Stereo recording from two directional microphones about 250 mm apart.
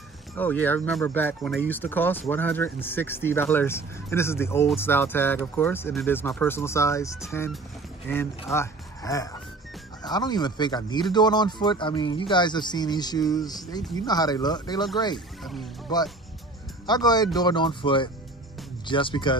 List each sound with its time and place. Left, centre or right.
0.4 s speech: centre
15.1 s speech: centre
16.8 s speech: centre